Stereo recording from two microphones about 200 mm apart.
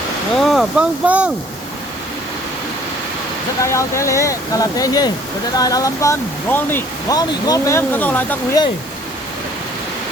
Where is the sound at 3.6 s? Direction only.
15° left (ahead or behind).